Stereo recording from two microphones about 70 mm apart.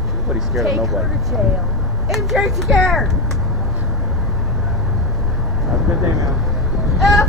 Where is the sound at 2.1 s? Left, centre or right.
Centre.